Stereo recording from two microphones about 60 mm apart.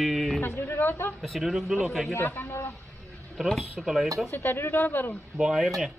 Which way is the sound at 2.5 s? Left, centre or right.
Left.